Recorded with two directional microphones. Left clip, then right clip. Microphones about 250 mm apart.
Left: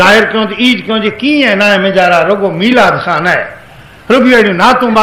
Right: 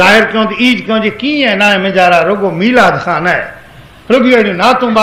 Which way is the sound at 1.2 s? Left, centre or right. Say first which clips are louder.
Left 3 dB; left.